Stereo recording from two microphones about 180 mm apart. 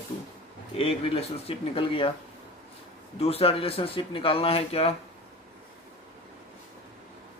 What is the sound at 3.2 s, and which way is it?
Speech, 35° left (ahead or behind).